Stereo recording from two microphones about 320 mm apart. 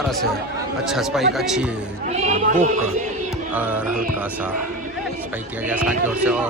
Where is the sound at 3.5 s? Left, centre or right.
Centre.